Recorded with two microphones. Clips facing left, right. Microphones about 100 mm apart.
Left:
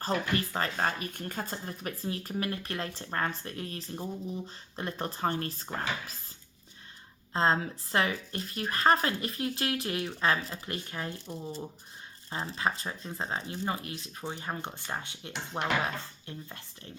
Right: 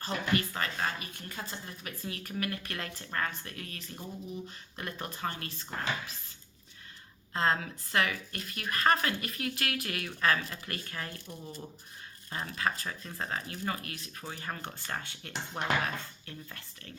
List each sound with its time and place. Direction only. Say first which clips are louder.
0.0 s speech: left 1 dB; 35° left (ahead or behind)
7.3 s speech: left 3 dB; 30° left (ahead or behind)